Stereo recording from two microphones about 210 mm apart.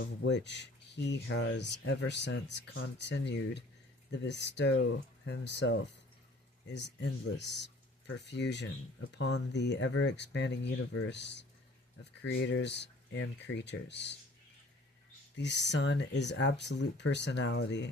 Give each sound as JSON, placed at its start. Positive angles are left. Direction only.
{"t": 0.0, "sound": "speech", "side_deg": 60}
{"t": 15.4, "sound": "speech", "side_deg": 55}